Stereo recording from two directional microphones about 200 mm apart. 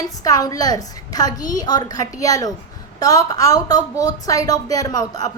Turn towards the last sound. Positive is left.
turn(degrees=20)  # may be behind; listen again after turning